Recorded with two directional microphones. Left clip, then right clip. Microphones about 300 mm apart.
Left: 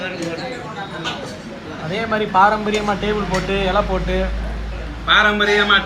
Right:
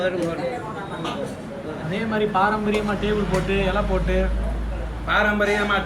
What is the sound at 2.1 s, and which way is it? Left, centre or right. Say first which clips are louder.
Speech: left 6 dB; centre.